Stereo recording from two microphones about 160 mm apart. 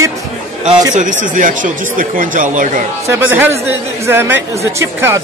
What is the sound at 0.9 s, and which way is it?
Speech, 55° right (ahead or behind).